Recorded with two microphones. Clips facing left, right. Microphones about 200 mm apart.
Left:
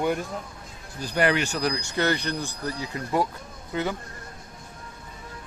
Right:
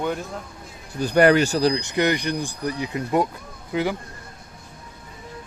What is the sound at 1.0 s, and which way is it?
A man's voice, 50° right (ahead or behind).